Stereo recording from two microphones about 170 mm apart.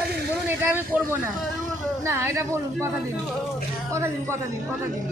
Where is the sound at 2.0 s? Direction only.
15° right (ahead or behind).